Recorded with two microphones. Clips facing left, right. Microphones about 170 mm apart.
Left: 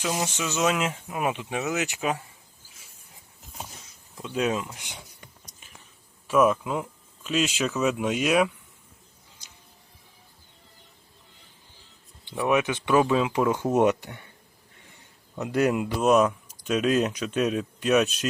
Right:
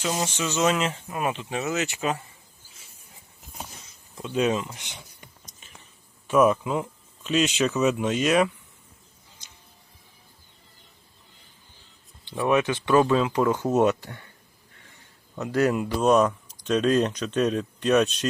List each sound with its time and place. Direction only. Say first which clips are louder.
0.0 s speech: right 1 dB; 10° left (ahead or behind)
4.2 s speech: right 2 dB; centre (ahead or behind)
6.2 s speech: right 1 dB; centre (ahead or behind)
12.4 s speech: right 1 dB; 10° left (ahead or behind)
14.8 s a sound: left 1 dB; 20° left (ahead or behind)
16.0 s speech: right 1 dB; 5° left (ahead or behind)